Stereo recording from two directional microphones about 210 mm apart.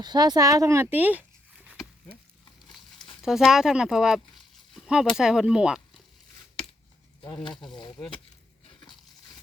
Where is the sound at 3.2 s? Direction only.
Centre (ahead or behind).